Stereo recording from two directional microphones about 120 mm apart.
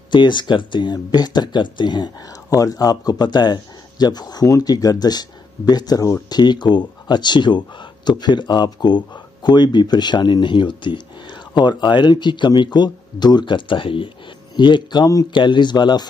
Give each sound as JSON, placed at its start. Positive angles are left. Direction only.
{"t": 0.1, "sound": "speech", "side_deg": 40}